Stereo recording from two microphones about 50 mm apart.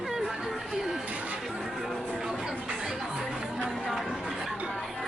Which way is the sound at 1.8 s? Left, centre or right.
Centre.